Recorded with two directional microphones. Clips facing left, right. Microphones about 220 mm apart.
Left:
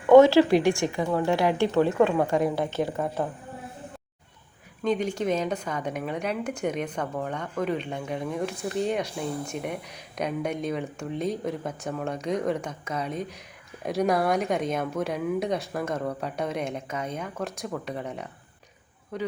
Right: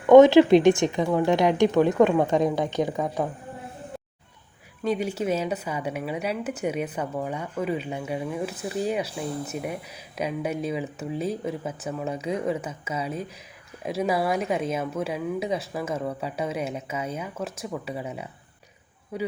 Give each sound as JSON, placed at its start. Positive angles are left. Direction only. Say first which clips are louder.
{"t": 0.1, "sound": "speech", "louder": "right 3 dB", "side_deg": -20}
{"t": 4.8, "sound": "speech", "louder": "even", "side_deg": -10}